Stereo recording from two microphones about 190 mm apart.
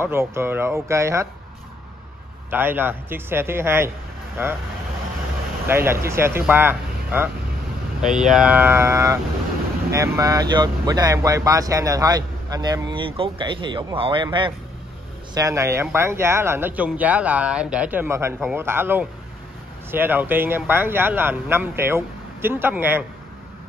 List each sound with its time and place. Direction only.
0.0 s a man's voice: 15° right (ahead or behind)
2.5 s a man's voice: 10° right (ahead or behind)
5.7 s a man's voice: 10° right (ahead or behind)
15.3 s a man's voice: 15° right (ahead or behind)